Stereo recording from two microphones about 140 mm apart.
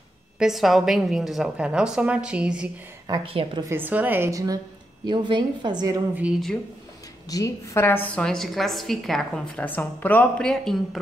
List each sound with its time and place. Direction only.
0.4 s a woman's voice: centre (ahead or behind)
3.1 s a woman's voice: 35° right (ahead or behind)
3.6 s a woman's voice: 15° right (ahead or behind); by 5.9 s 30° right (ahead or behind)
7.2 s a woman's voice: 25° left (ahead or behind)
8.1 s a woman's voice: 5° left (ahead or behind)
9.7 s speech: 15° left (ahead or behind)